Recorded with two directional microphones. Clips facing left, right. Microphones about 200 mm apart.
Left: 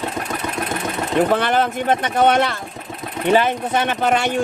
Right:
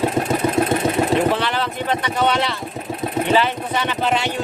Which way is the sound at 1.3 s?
50° left (ahead or behind).